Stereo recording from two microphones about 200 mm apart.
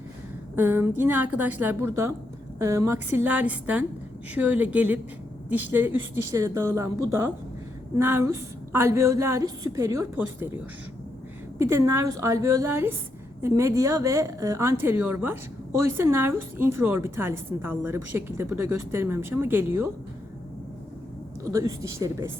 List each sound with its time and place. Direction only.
0.5 s a woman's voice: 10° right (ahead or behind)
11.6 s a woman's voice: 15° right (ahead or behind)
21.5 s a woman's voice: 15° right (ahead or behind)